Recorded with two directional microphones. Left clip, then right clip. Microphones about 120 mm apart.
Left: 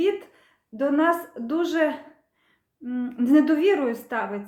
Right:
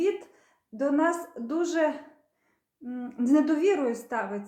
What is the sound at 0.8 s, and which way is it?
A woman's voice, 15° left (ahead or behind).